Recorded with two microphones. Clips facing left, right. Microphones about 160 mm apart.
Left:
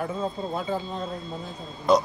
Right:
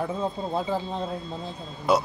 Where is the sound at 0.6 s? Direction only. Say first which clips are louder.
Right 3 dB; 30° right (ahead or behind).